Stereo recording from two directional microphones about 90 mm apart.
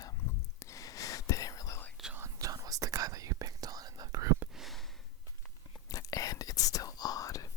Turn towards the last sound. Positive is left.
turn(degrees=40)  # may be behind; listen again after turning